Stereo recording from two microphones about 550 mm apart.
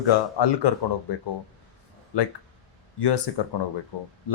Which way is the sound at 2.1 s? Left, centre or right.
Left.